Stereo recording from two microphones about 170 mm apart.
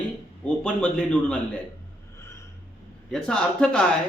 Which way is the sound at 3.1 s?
5° left (ahead or behind).